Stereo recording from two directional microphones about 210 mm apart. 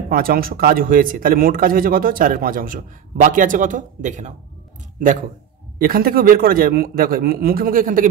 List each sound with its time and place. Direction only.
0.1 s speech: 45° right (ahead or behind)
5.8 s a man's voice: 45° right (ahead or behind)